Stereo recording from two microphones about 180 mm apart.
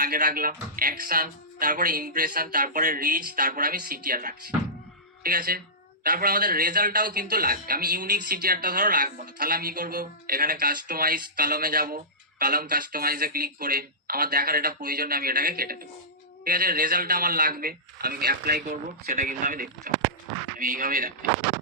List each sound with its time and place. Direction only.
0.0 s a man's voice: 55° right (ahead or behind)